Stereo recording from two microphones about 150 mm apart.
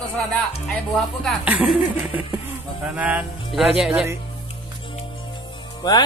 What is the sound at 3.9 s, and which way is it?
Speech, 15° right (ahead or behind).